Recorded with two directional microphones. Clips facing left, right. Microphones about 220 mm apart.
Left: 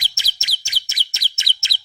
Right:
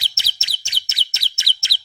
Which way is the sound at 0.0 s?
15° left (ahead or behind).